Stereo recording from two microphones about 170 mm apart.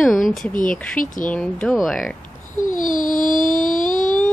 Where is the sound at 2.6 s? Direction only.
50° left (ahead or behind).